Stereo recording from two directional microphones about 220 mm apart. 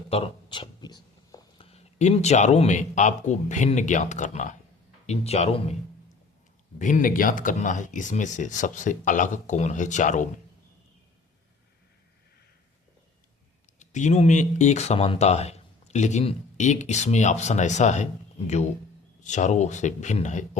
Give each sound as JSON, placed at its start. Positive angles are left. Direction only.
{"t": 0.1, "sound": "speech", "side_deg": 25}
{"t": 6.7, "sound": "speech", "side_deg": 35}
{"t": 13.7, "sound": "speech", "side_deg": 35}